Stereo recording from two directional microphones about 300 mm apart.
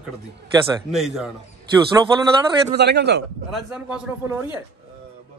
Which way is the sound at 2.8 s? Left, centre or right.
Right.